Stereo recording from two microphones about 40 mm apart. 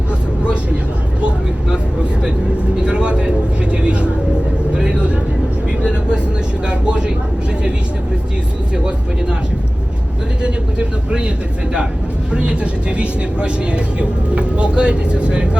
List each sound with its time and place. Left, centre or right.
2.8 s vehicle: right
10.4 s vehicle: right
12.3 s vehicle: right